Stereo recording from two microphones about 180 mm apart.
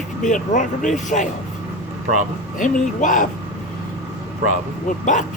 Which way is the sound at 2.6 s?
45° left (ahead or behind).